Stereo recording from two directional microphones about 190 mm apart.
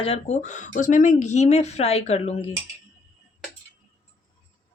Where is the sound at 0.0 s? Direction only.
35° left (ahead or behind).